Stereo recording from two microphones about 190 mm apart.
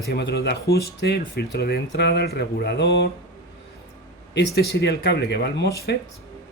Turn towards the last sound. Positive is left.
turn(degrees=60)  # may be behind; listen again after turning